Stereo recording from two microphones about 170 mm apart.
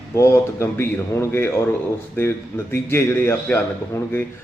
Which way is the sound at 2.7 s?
15° left (ahead or behind).